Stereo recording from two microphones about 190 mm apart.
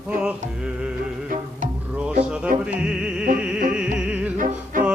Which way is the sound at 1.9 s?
5° right (ahead or behind).